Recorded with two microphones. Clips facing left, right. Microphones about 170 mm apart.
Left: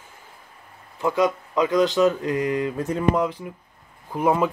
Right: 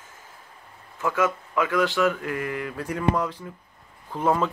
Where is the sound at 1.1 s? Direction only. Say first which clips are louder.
Left 3 dB; 15° left (ahead or behind).